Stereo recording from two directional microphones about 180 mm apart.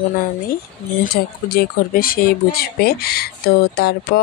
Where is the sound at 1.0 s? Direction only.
55° left (ahead or behind).